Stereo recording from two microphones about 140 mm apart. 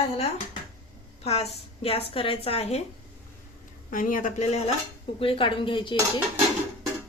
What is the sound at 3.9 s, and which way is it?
Speech, 75° left (ahead or behind).